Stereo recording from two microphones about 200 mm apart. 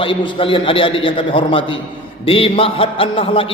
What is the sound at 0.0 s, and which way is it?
A man's voice, 25° left (ahead or behind).